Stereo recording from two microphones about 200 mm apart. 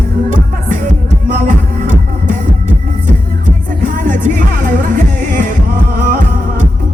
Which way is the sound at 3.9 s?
40° right (ahead or behind).